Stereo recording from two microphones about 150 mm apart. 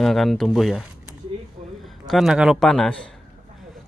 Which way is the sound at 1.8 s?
Centre (ahead or behind).